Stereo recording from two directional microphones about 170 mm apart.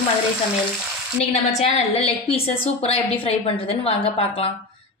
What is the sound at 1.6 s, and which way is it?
A woman's voice, 35° left (ahead or behind).